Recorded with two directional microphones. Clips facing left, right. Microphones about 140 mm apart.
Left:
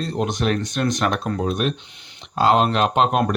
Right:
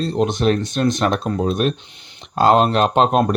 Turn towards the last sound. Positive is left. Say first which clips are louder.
# right 3 dB
turn(degrees=-35)  # may be behind; listen again after turning